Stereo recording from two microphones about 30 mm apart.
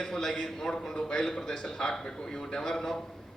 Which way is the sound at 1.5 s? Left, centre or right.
Left.